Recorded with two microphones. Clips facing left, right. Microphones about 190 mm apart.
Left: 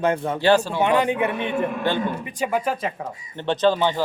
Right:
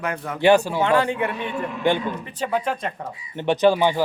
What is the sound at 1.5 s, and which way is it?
Speech, 45° left (ahead or behind).